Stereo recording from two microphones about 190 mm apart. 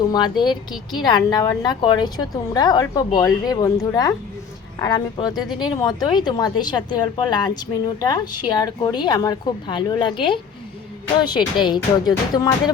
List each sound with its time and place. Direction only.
0.4 s a woman's voice: 25° left (ahead or behind)